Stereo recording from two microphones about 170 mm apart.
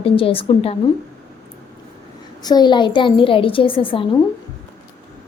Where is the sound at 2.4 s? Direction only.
25° left (ahead or behind).